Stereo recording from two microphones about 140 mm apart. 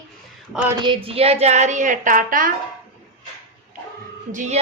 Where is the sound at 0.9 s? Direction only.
40° right (ahead or behind); by 2.5 s 75° right (ahead or behind).